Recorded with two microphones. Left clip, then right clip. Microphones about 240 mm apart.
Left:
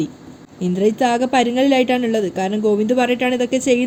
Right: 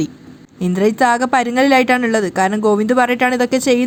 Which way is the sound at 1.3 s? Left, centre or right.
Right.